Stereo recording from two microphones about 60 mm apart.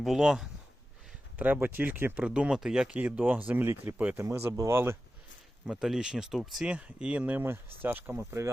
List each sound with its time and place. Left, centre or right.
0.0 s speech: centre
1.4 s speech: right
2.2 s speech: centre
2.9 s speech: right
4.2 s speech: right
5.8 s speech: centre
6.7 s speech: centre
7.4 s speech: right